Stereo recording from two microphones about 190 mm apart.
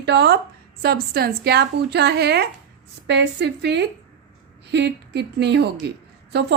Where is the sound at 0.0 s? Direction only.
60° right (ahead or behind).